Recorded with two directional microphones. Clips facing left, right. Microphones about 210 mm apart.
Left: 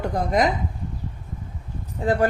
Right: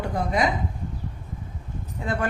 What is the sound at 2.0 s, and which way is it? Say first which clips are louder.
Speech: left 7 dB; 35° left (ahead or behind).